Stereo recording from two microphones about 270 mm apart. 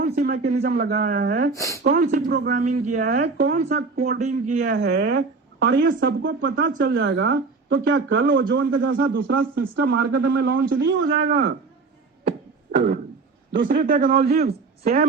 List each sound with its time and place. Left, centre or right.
0.0 s speech: right
1.5 s speech: centre
1.8 s speech: right
9.2 s speech: right
9.6 s speech: right
11.3 s a man's voice: right
13.5 s speech: right